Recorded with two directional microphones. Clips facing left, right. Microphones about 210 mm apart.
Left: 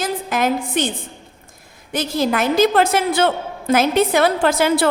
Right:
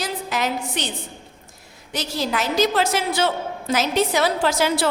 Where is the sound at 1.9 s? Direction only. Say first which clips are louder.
Left 6 dB; 55° left (ahead or behind).